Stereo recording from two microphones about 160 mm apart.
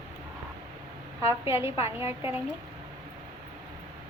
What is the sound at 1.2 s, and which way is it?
A woman's voice, 15° right (ahead or behind).